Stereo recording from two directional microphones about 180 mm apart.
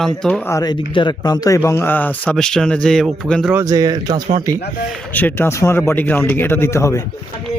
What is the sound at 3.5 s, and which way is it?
Speech, 20° right (ahead or behind).